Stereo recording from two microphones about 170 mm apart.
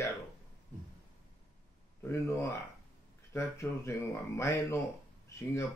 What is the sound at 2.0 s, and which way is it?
Speech, 15° left (ahead or behind).